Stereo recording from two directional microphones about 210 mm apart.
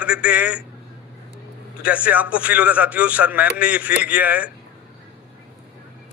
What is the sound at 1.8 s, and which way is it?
A man's voice, 5° right (ahead or behind).